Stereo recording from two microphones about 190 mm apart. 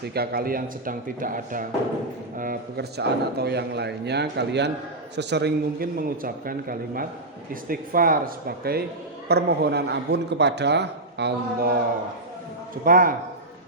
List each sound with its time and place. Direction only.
0.0 s a man's voice: 55° right (ahead or behind)
12.8 s a man's voice: 45° right (ahead or behind)